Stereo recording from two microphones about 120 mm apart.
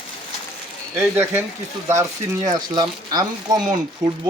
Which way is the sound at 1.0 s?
15° right (ahead or behind).